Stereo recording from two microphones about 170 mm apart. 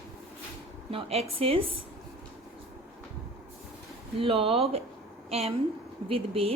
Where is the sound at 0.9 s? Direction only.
35° right (ahead or behind).